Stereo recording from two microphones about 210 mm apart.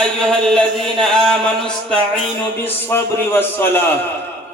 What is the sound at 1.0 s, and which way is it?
Mantra, centre (ahead or behind).